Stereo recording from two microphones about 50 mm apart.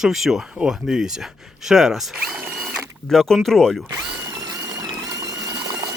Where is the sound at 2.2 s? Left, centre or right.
Right.